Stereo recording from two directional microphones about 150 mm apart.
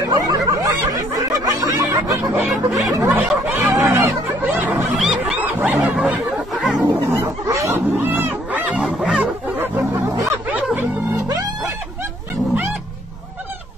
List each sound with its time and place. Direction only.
0.0 s snicker: 25° right (ahead or behind)
2.4 s a sound: centre (ahead or behind)
3.1 s snicker: 10° right (ahead or behind)
7.1 s wild animals: 20° right (ahead or behind)